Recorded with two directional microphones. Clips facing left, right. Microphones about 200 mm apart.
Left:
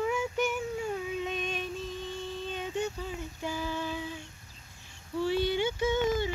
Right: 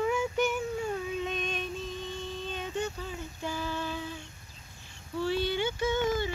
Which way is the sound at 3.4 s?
10° left (ahead or behind).